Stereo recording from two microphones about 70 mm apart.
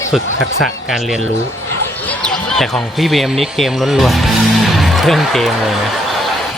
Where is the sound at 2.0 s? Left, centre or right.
Centre.